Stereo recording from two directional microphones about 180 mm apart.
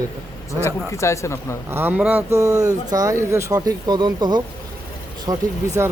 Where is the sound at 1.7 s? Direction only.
10° right (ahead or behind).